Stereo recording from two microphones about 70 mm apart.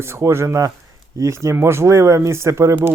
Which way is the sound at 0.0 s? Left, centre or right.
Right.